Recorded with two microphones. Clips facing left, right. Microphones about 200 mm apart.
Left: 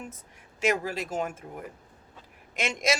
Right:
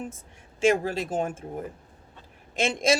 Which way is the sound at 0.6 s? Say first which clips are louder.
Right 5 dB; 25° right (ahead or behind).